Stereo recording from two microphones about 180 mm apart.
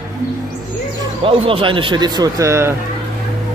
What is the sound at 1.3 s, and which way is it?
A man's voice, 30° right (ahead or behind).